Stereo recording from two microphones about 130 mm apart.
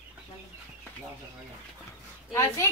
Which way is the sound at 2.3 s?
25° left (ahead or behind).